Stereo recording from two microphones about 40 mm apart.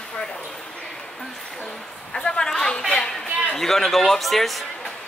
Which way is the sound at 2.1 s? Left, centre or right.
Centre.